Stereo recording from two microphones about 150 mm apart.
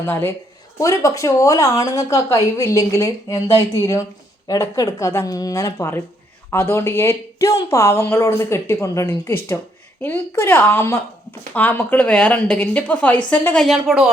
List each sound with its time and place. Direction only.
0.0 s a woman's voice: 15° left (ahead or behind); by 14.1 s centre (ahead or behind)